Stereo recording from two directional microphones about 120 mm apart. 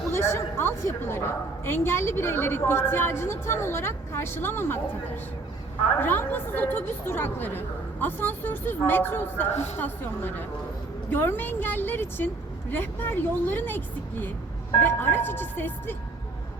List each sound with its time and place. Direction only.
0.1 s a woman's voice: 20° left (ahead or behind)
6.0 s a woman's voice: 15° left (ahead or behind)
9.5 s a woman's voice: 65° left (ahead or behind)
9.7 s a woman's voice: 15° left (ahead or behind)